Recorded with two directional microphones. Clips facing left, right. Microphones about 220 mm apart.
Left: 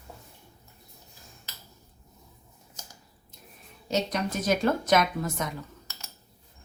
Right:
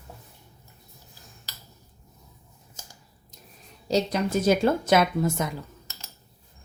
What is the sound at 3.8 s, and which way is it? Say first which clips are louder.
A woman's voice: right 4 dB; 30° right (ahead or behind).